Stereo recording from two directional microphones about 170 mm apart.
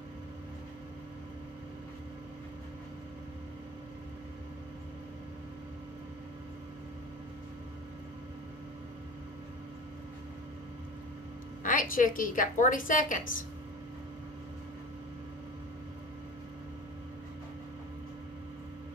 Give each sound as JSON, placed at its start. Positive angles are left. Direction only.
{"t": 11.6, "sound": "a woman's voice", "side_deg": 50}